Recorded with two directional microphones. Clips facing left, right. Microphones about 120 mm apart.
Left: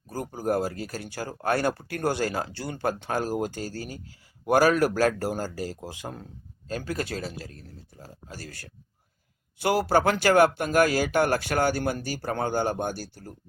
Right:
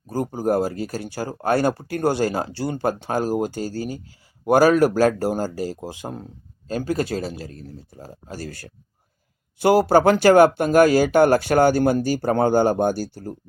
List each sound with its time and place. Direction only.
0.1 s speech: 25° right (ahead or behind)